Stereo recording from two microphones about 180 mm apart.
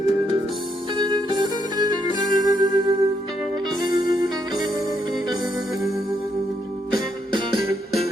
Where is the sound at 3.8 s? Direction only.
20° right (ahead or behind).